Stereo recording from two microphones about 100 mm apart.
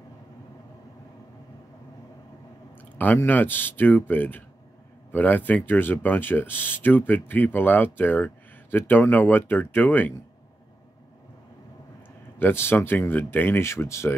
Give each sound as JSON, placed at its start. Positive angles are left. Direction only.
{"t": 3.2, "sound": "speech", "side_deg": 20}
{"t": 12.4, "sound": "speech", "side_deg": 20}